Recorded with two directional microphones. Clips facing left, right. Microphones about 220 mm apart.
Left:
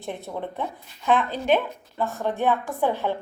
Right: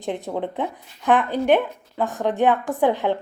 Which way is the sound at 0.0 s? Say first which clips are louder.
Right 5 dB; 15° right (ahead or behind).